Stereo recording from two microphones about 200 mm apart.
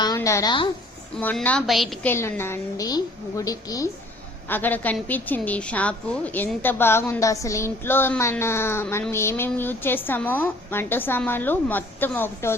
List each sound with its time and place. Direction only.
0.0 s a woman's voice: 15° left (ahead or behind)
1.1 s a woman's voice: 5° left (ahead or behind)
2.0 s a woman's voice: 10° left (ahead or behind)